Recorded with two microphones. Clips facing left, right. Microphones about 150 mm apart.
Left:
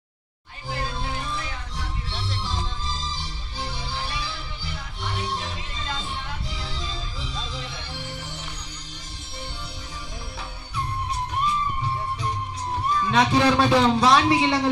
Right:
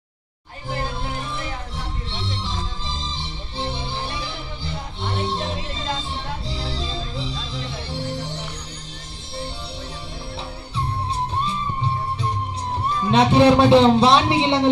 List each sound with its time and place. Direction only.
2.4 s music: 25° right (ahead or behind)
11.3 s music: 25° right (ahead or behind)
13.0 s a man's voice: 25° right (ahead or behind)